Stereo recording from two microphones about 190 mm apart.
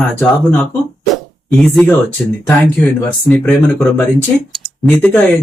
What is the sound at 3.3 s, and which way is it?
Speech, 5° left (ahead or behind).